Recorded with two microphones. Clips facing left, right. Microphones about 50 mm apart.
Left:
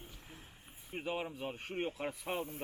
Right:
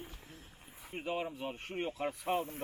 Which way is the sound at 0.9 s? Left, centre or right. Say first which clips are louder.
Right 1 dB; centre.